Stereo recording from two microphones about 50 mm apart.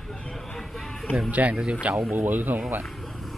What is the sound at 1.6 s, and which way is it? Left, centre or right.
Speech, centre.